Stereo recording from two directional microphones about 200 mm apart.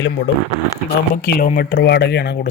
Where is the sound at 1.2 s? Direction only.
50° left (ahead or behind).